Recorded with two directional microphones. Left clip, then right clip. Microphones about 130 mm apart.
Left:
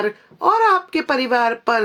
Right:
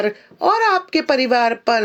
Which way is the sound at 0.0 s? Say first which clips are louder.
Even; 15° right (ahead or behind).